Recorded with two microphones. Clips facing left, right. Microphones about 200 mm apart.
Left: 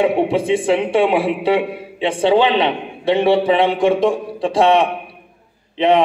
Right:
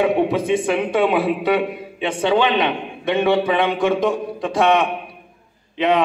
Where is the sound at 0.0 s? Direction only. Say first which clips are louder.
Left 2 dB; 30° left (ahead or behind).